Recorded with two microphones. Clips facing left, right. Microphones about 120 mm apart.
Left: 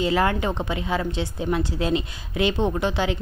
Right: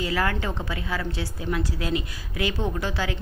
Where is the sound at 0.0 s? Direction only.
25° left (ahead or behind).